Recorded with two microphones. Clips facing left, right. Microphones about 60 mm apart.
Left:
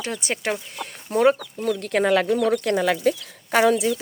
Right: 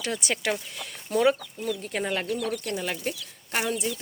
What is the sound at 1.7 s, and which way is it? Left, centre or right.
Speech, left.